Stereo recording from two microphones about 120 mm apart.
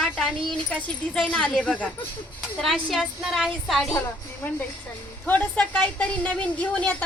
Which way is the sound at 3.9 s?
20° left (ahead or behind).